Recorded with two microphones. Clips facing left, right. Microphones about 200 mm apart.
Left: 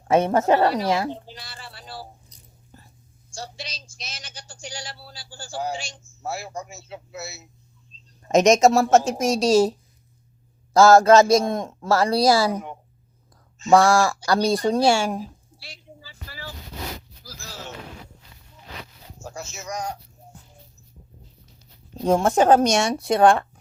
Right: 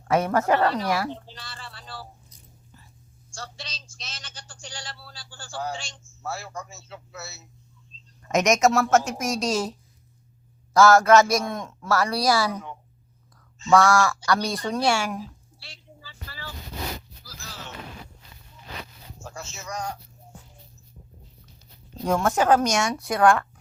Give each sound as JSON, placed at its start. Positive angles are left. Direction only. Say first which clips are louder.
{"t": 0.1, "sound": "a man's voice", "louder": "left 3 dB", "side_deg": 25}
{"t": 1.1, "sound": "speech", "louder": "left 2 dB", "side_deg": 10}
{"t": 2.7, "sound": "a sound", "louder": "left 5 dB", "side_deg": 45}
{"t": 3.6, "sound": "a man's voice", "louder": "left 3 dB", "side_deg": 10}
{"t": 8.2, "sound": "a man's voice", "louder": "left 5 dB", "side_deg": 30}
{"t": 10.8, "sound": "a man's voice", "louder": "left 3 dB", "side_deg": 30}
{"t": 15.2, "sound": "a sound", "louder": "left 3 dB", "side_deg": 10}
{"t": 19.2, "sound": "speech", "louder": "left 3 dB", "side_deg": 20}
{"t": 22.0, "sound": "a man's voice", "louder": "left 4 dB", "side_deg": 30}